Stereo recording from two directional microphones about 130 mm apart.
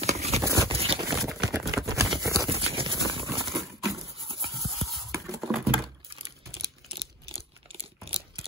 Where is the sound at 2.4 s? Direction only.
45° right (ahead or behind).